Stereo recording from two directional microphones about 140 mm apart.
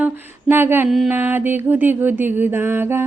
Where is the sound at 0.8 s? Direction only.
Centre (ahead or behind).